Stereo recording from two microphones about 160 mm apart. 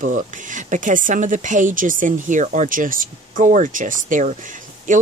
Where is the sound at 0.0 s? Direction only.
55° right (ahead or behind).